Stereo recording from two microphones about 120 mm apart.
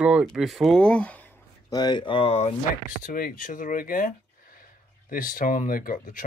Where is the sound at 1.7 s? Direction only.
35° left (ahead or behind); by 2.5 s 55° left (ahead or behind).